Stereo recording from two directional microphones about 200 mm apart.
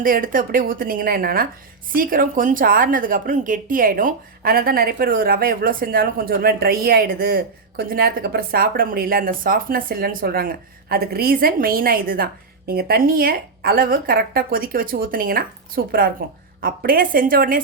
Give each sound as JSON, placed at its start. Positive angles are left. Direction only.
{"t": 0.0, "sound": "a woman's voice", "side_deg": -45}